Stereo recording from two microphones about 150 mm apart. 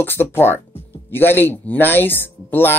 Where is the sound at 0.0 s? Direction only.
15° left (ahead or behind).